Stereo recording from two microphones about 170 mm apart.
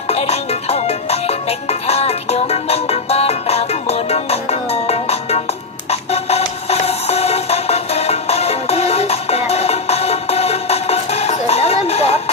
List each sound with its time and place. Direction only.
0.1 s music: 40° left (ahead or behind)